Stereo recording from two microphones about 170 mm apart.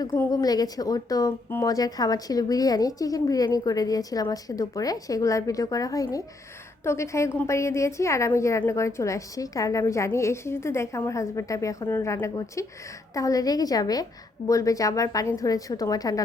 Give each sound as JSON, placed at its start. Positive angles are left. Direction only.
{"t": 0.0, "sound": "a woman's voice", "side_deg": 20}